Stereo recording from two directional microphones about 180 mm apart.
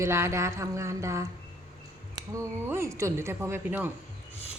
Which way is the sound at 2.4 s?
15° right (ahead or behind).